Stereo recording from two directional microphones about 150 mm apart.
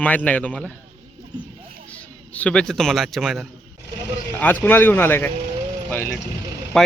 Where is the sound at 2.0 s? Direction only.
10° left (ahead or behind).